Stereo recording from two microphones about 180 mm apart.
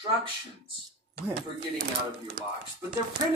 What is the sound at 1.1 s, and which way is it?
Speech, 60° right (ahead or behind).